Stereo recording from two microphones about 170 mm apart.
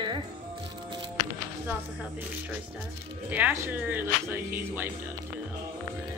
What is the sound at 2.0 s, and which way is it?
Speech, 10° right (ahead or behind).